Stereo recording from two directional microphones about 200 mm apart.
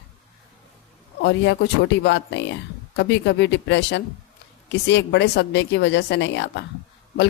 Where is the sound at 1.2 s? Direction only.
60° left (ahead or behind).